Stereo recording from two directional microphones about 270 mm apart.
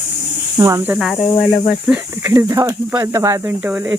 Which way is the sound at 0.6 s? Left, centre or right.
Centre.